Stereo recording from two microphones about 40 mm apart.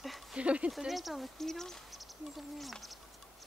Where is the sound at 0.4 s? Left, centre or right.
Right.